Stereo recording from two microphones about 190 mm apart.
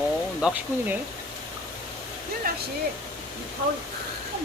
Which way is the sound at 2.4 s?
50° right (ahead or behind).